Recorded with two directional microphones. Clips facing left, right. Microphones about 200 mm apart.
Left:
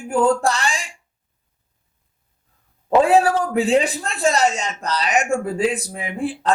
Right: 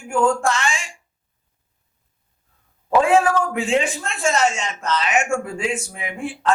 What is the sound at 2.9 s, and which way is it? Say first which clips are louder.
Speech: left 1 dB; 35° left (ahead or behind).